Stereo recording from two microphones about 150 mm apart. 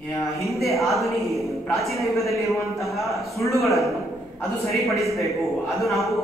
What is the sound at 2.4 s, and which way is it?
Speech, 20° left (ahead or behind).